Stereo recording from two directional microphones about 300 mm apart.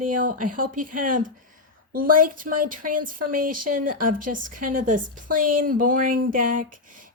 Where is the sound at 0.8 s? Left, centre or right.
Right.